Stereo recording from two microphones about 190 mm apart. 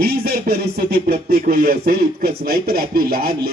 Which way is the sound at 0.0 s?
55° right (ahead or behind).